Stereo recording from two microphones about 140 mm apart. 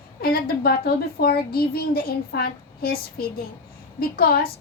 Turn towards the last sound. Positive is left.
turn(degrees=90)